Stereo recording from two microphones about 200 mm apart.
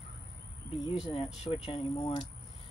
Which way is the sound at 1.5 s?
30° left (ahead or behind).